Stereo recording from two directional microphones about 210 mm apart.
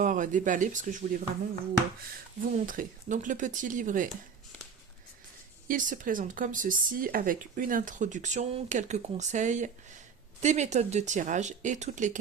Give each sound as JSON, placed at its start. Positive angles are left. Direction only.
{"t": 0.0, "sound": "speech", "side_deg": -40}
{"t": 2.4, "sound": "speech", "side_deg": -40}
{"t": 5.6, "sound": "speech", "side_deg": -40}